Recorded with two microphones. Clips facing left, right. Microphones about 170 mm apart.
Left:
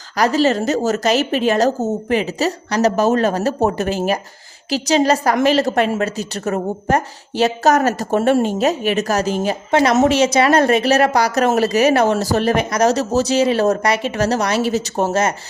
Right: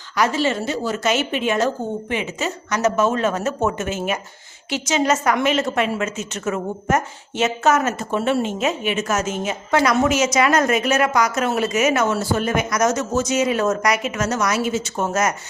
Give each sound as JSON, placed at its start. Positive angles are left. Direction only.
{"t": 0.2, "sound": "a woman's voice", "side_deg": 40}